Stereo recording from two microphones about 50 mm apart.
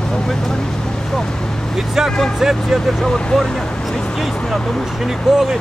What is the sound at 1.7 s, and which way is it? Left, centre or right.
Speech, centre.